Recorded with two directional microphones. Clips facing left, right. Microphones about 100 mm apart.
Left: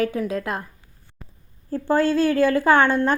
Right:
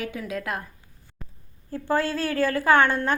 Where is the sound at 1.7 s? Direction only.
30° left (ahead or behind).